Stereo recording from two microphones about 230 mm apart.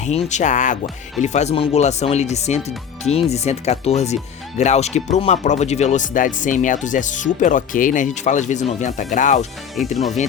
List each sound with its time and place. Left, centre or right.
0.0 s speech: left